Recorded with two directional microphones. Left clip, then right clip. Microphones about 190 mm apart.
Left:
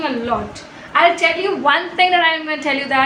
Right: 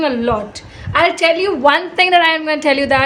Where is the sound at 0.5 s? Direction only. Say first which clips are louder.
Right 1 dB; 60° right (ahead or behind).